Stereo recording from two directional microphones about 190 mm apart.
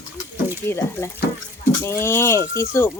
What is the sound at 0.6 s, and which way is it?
Speech, 15° left (ahead or behind).